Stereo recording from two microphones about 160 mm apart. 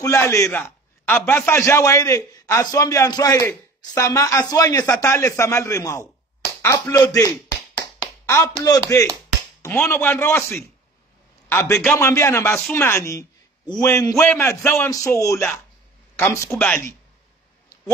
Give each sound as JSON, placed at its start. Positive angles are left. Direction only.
{"t": 0.0, "sound": "a man's voice", "side_deg": 20}
{"t": 6.6, "sound": "a sound", "side_deg": 20}
{"t": 8.5, "sound": "a man's voice", "side_deg": 25}
{"t": 11.4, "sound": "a man's voice", "side_deg": 15}